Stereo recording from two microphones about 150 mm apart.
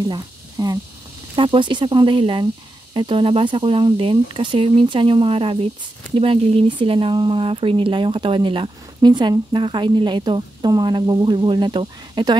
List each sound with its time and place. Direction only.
0.1 s speech: 25° right (ahead or behind)